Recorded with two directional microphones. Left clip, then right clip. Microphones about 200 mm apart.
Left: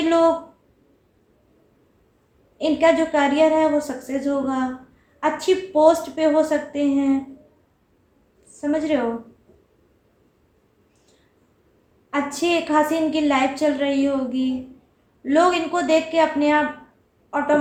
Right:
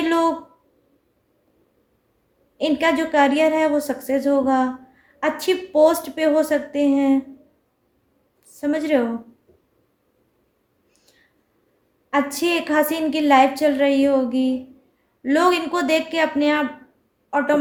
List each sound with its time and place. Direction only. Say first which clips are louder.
2.6 s a woman's voice: left 2 dB; 55° right (ahead or behind)
8.7 s a woman's voice: right 1 dB; 55° right (ahead or behind)
12.1 s a woman's voice: right 1 dB; 55° right (ahead or behind)